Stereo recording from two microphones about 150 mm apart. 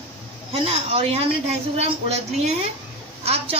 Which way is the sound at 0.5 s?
40° right (ahead or behind).